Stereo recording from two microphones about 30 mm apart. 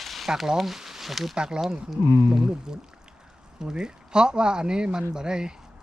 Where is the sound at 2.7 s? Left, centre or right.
Right.